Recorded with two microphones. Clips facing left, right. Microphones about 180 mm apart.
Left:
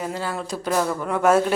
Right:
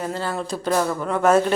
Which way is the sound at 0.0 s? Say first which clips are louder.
Right 2 dB; 10° left (ahead or behind).